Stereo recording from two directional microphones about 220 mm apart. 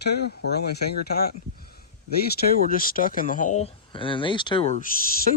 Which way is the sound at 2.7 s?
40° left (ahead or behind).